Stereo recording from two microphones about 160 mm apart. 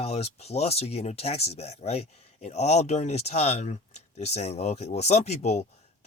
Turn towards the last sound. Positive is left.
turn(degrees=45)  # may be behind; listen again after turning